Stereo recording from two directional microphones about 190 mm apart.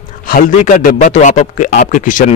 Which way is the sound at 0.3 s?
45° left (ahead or behind).